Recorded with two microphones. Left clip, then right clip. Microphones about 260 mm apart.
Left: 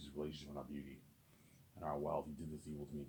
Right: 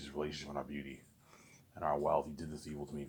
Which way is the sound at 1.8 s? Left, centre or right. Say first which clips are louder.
Right 9 dB; right.